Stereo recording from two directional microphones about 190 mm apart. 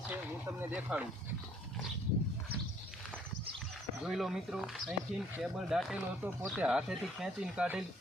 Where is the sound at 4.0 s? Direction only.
Centre (ahead or behind).